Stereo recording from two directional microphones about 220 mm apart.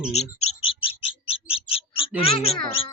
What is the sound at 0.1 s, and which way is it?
Bird, 30° left (ahead or behind).